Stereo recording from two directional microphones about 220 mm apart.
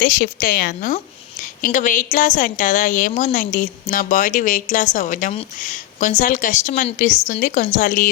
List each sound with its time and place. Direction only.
0.0 s a woman's voice: 40° left (ahead or behind)